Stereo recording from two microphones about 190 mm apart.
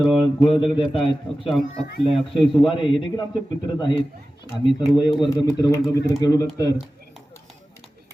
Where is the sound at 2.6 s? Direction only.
25° left (ahead or behind).